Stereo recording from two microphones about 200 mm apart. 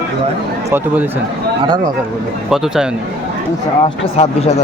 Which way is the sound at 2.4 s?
Centre (ahead or behind).